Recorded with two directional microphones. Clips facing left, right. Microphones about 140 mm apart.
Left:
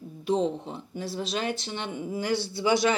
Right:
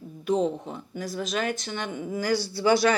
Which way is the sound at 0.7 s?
30° left (ahead or behind).